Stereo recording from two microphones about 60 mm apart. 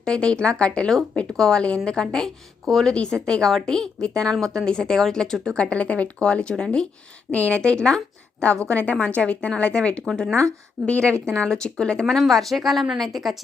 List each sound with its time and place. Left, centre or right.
0.0 s speech: centre
2.9 s a woman's voice: centre
8.6 s speech: left; by 13.3 s centre